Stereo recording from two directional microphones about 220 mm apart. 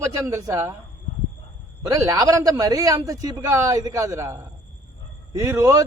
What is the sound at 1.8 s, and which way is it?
Speech, 15° right (ahead or behind).